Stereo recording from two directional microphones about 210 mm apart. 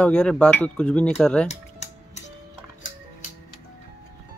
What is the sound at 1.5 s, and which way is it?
Music, 30° left (ahead or behind).